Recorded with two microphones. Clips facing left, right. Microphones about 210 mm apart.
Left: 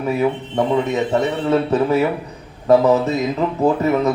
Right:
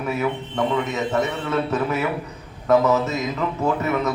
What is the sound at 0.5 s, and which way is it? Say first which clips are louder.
A man's voice: left 4 dB; 30° left (ahead or behind).